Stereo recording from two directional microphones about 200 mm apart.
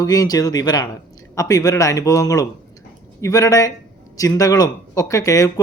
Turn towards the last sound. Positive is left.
turn(degrees=15)  # may be behind; listen again after turning